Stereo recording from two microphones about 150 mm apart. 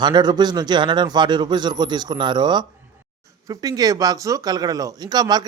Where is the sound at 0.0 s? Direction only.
30° right (ahead or behind).